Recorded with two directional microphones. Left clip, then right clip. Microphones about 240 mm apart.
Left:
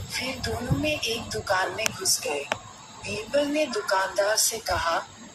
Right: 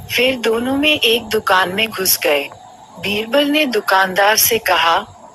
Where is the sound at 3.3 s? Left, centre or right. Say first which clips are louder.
Right 9 dB; right.